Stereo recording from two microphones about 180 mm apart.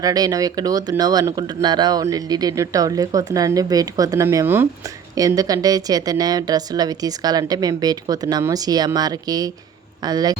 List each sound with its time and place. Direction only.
0.0 s speech: 20° right (ahead or behind)